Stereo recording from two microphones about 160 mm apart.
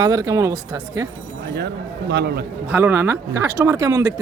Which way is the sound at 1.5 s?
90° right.